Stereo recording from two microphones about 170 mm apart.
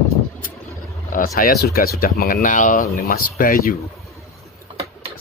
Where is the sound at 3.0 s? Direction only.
60° left (ahead or behind).